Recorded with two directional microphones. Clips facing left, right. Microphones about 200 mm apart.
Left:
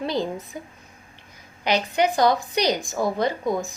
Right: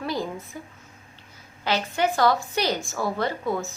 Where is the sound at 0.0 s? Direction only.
20° left (ahead or behind).